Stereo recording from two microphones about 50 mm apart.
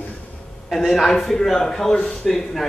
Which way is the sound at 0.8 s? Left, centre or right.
Centre.